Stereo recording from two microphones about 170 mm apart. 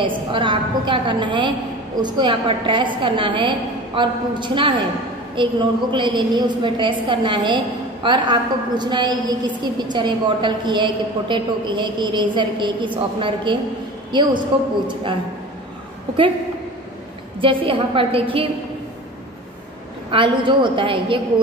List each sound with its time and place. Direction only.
0.0 s a woman's voice: 30° right (ahead or behind)
17.4 s a woman's voice: 30° right (ahead or behind)
20.1 s a woman's voice: 30° right (ahead or behind)